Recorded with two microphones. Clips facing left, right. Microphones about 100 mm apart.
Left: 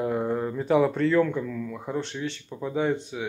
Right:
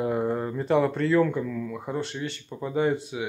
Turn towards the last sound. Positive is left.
turn(degrees=-5)  # may be behind; listen again after turning